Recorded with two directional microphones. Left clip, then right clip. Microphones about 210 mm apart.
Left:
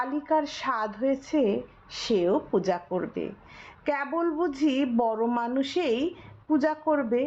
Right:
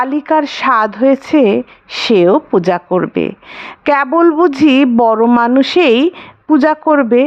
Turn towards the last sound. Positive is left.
turn(degrees=-45)  # may be behind; listen again after turning